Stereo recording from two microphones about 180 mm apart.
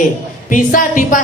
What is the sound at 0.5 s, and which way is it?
Speech, 50° left (ahead or behind).